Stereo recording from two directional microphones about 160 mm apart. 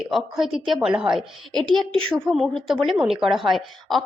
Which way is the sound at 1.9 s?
35° right (ahead or behind).